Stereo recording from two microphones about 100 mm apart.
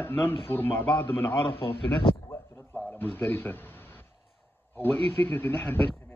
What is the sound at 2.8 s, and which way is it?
Speech, 20° left (ahead or behind).